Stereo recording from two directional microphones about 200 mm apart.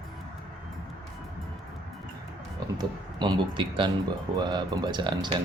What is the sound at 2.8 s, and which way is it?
Speech, 20° right (ahead or behind).